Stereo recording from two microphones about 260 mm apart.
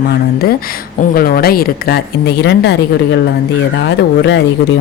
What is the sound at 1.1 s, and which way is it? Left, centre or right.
Speech, left.